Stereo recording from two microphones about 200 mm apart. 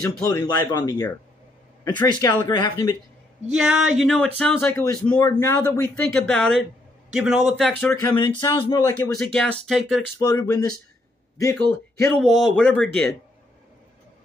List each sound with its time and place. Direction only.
0.3 s speech: 15° left (ahead or behind)
3.5 s speech: 5° right (ahead or behind)
7.9 s speech: 15° left (ahead or behind)
9.2 s speech: 5° left (ahead or behind)
10.1 s speech: 15° left (ahead or behind)